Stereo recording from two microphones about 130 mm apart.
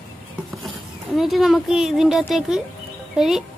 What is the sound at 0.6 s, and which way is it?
Speech, centre (ahead or behind).